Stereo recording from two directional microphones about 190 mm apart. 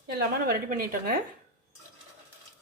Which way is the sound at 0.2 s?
50° right (ahead or behind).